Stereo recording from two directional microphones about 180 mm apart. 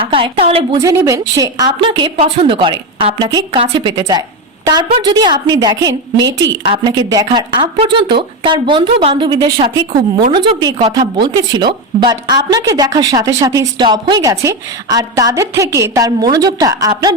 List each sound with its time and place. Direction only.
0.0 s a woman's voice: 30° right (ahead or behind)
0.8 s a woman's voice: 15° right (ahead or behind)